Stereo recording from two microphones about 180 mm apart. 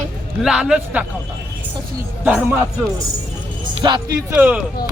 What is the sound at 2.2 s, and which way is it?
Speech, 10° right (ahead or behind).